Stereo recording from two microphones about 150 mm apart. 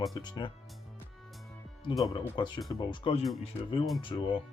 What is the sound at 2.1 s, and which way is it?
Speech, 30° left (ahead or behind).